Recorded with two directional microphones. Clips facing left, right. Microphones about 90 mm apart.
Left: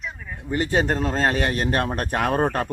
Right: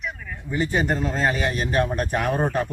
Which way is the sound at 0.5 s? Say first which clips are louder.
Left 1 dB; 65° left (ahead or behind).